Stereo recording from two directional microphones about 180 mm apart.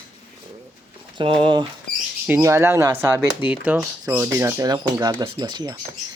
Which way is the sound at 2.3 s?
15° right (ahead or behind).